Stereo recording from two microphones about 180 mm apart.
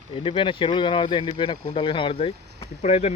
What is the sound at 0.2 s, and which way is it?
Speech, 30° left (ahead or behind).